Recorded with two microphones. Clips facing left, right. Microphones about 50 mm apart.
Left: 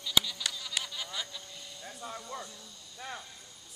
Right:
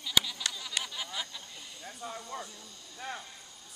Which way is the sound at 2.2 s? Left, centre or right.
Centre.